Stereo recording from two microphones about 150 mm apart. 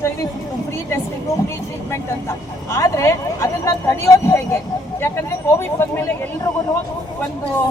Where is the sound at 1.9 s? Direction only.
20° left (ahead or behind).